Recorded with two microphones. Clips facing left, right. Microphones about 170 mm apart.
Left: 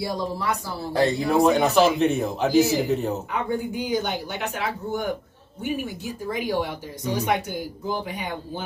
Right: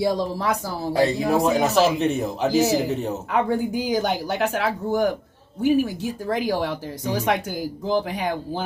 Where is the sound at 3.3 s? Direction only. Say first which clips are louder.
Right 5 dB; 90° right.